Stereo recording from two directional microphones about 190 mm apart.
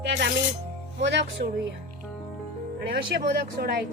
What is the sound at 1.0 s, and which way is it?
Speech, 65° right (ahead or behind).